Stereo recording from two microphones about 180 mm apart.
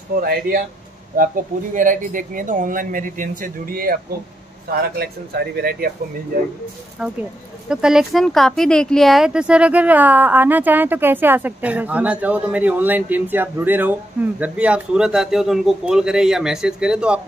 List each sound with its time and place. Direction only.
0.2 s speech: 55° right (ahead or behind)
7.0 s speech: 5° right (ahead or behind)